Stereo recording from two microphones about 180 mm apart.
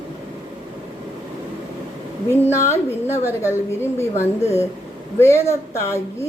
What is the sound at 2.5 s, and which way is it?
A woman's voice, 15° left (ahead or behind).